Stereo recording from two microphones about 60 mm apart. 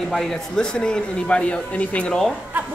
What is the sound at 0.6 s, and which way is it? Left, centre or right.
A man's voice, centre.